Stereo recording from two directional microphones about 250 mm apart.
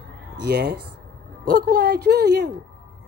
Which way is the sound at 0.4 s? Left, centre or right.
Right.